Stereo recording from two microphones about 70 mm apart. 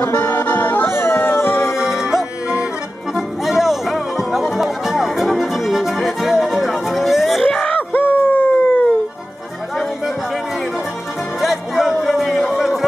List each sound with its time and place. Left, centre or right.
0.0 s music: left
1.8 s music: centre
7.5 s a sound: centre
7.9 s howl: left
11.4 s music: centre